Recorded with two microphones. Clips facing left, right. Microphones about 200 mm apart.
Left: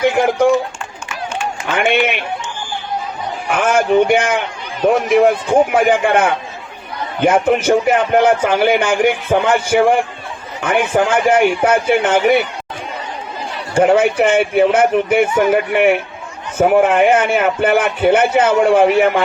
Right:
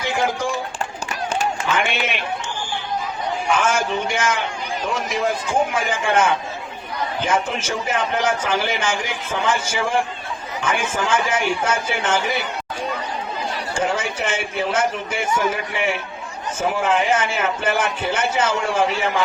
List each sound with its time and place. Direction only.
0.0 s a sound: 60° left (ahead or behind)
1.7 s run: 60° left (ahead or behind)
3.5 s a man's voice: 60° left (ahead or behind)
13.7 s a man's voice: 60° left (ahead or behind)